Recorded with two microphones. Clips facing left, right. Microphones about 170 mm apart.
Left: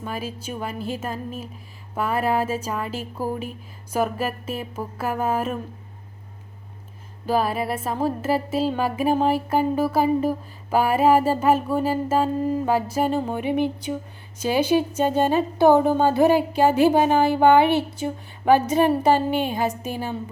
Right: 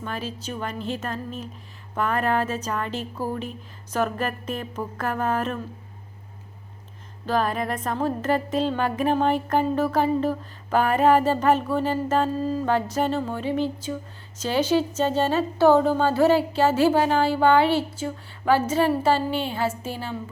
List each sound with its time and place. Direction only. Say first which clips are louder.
0.0 s music: left 1 dB; 10° left (ahead or behind)
7.3 s music: left 2 dB; 10° left (ahead or behind)